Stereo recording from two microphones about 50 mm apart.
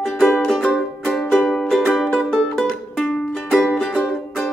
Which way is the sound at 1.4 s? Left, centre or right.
Centre.